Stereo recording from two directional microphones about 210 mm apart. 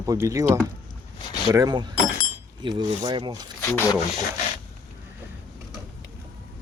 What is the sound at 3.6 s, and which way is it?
Speech, 10° left (ahead or behind).